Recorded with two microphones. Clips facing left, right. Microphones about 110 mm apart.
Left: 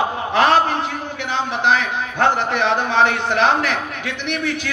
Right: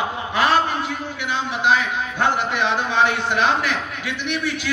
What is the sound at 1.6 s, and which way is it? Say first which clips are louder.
Speech: even; 55° left (ahead or behind).